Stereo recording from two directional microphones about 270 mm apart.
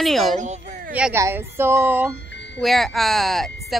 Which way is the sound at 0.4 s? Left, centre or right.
Right.